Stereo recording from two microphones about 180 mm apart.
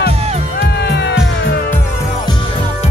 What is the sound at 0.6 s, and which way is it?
Music, 70° left (ahead or behind).